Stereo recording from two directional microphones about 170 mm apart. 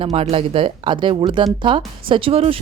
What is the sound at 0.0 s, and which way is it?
A woman's voice, 35° right (ahead or behind).